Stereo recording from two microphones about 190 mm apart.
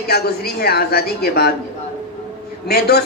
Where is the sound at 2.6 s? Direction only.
55° left (ahead or behind).